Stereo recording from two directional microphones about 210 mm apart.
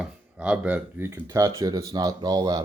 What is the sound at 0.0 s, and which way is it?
Speech, 5° right (ahead or behind).